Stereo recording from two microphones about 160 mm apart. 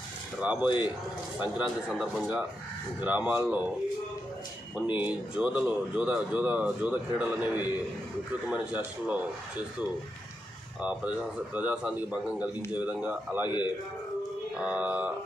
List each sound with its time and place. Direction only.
0.4 s speech: 10° right (ahead or behind)
0.7 s a man's voice: 30° left (ahead or behind)
1.4 s speech: 5° right (ahead or behind)
4.9 s speech: 10° right (ahead or behind)
10.8 s speech: 10° right (ahead or behind)
13.5 s a man's voice: 25° left (ahead or behind)
14.6 s speech: 10° right (ahead or behind)